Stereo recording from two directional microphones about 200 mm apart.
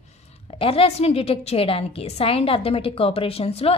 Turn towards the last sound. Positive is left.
turn(degrees=30)  # may be behind; listen again after turning